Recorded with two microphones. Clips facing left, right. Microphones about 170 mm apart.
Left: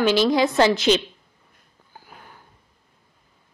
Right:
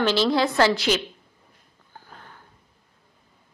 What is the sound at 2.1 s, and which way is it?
Sniff, 10° left (ahead or behind).